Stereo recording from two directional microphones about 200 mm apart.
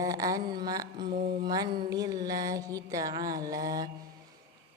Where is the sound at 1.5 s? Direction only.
20° right (ahead or behind).